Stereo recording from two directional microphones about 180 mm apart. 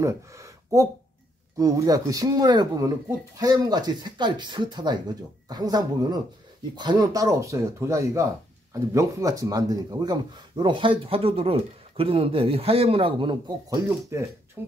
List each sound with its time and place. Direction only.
0.0 s speech: 15° right (ahead or behind)
14.1 s speech: 15° right (ahead or behind)